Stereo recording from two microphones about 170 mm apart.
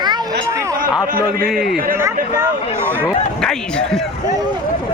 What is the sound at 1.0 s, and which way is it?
Speech, 60° right (ahead or behind).